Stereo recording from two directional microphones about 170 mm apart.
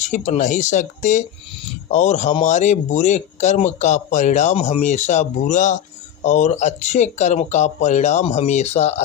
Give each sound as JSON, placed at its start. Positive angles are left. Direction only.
{"t": 0.0, "sound": "speech", "side_deg": 45}